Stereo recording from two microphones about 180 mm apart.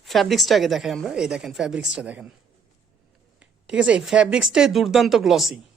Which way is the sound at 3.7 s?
5° right (ahead or behind).